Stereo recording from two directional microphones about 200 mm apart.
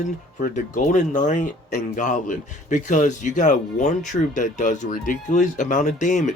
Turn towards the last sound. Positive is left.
turn(degrees=40)  # may be behind; listen again after turning